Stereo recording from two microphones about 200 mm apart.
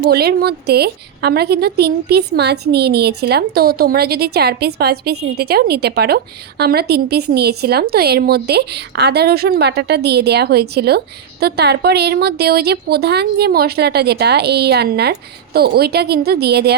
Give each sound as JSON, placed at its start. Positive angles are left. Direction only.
{"t": 0.0, "sound": "a woman's voice", "side_deg": -50}